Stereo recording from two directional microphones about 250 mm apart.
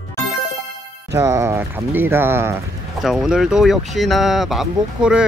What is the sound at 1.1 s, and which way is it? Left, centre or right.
Speech, centre.